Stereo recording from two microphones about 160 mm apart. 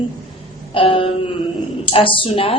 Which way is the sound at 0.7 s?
35° left (ahead or behind).